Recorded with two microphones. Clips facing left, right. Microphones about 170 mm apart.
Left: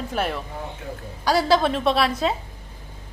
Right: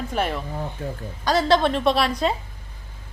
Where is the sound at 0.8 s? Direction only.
35° right (ahead or behind).